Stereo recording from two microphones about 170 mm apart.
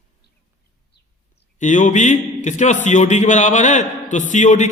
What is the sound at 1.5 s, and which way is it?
A man's voice, 45° left (ahead or behind).